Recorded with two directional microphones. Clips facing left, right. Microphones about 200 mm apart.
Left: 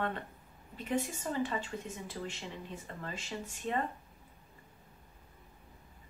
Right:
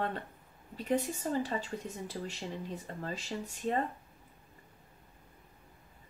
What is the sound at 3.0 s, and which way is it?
Speech, 35° right (ahead or behind).